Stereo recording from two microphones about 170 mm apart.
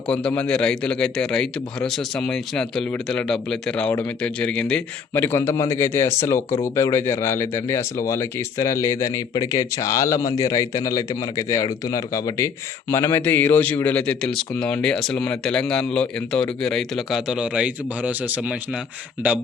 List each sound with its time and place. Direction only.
0.1 s a man's voice: 5° left (ahead or behind)